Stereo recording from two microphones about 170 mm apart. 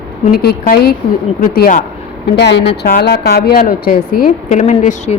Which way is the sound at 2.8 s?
65° left (ahead or behind).